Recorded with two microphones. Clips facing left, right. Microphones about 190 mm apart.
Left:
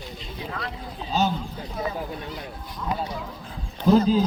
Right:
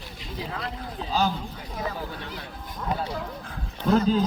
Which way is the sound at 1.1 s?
25° left (ahead or behind).